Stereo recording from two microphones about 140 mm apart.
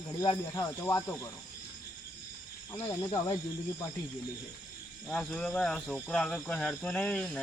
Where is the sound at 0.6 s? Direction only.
15° left (ahead or behind).